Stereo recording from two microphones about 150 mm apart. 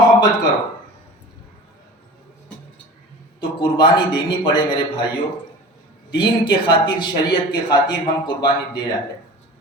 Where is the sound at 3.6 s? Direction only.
30° left (ahead or behind).